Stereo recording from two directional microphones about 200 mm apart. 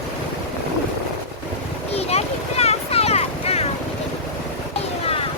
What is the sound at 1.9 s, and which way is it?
Vehicle, 30° left (ahead or behind).